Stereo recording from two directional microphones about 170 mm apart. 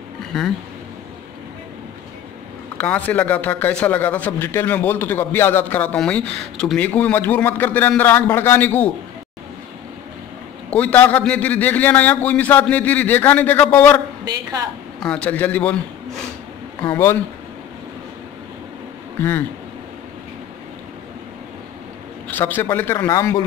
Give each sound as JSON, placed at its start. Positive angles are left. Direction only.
{"t": 2.8, "sound": "speech", "side_deg": 10}
{"t": 10.7, "sound": "speech", "side_deg": 10}
{"t": 14.2, "sound": "a woman's voice", "side_deg": -20}
{"t": 15.0, "sound": "speech", "side_deg": 5}
{"t": 16.8, "sound": "speech", "side_deg": 15}
{"t": 22.3, "sound": "speech", "side_deg": 10}